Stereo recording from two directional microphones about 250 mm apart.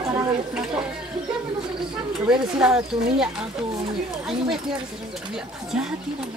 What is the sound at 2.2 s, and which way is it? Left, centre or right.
Speech, centre.